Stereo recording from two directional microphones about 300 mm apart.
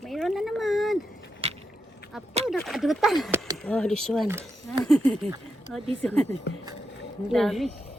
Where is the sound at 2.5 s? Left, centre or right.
Centre.